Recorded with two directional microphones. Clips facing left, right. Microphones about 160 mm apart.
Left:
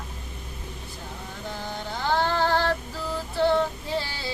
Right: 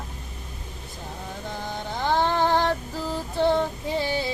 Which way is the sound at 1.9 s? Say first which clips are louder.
Right 2 dB; 20° right (ahead or behind).